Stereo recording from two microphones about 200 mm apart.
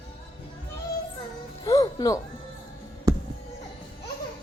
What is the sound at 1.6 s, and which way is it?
Music, 20° left (ahead or behind).